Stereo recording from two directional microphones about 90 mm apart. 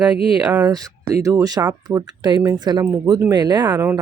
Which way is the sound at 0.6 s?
45° right (ahead or behind).